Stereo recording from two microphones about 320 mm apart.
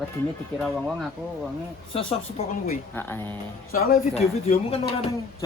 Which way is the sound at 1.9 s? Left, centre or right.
Centre.